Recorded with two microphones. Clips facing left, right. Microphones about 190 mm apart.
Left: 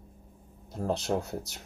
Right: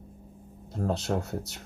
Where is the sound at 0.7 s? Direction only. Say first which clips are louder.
Even; 5° left (ahead or behind).